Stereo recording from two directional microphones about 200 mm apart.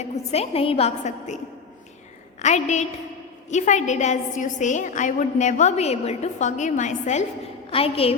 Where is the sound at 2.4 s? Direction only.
35° left (ahead or behind).